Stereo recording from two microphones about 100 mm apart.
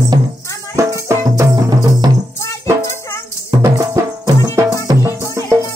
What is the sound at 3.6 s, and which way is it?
Music, 40° right (ahead or behind).